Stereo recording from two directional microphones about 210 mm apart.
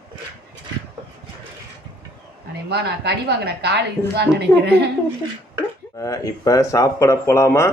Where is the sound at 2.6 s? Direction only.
50° right (ahead or behind).